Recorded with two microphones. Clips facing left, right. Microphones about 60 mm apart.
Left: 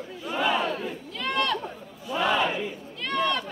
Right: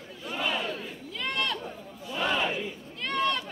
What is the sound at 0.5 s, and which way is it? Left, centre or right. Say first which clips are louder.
Battle cry: left 6 dB; left.